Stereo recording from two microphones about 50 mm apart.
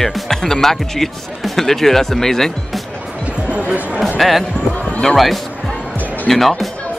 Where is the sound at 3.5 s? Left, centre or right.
Right.